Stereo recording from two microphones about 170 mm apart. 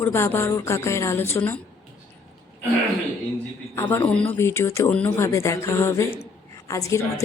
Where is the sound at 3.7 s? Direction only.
15° left (ahead or behind).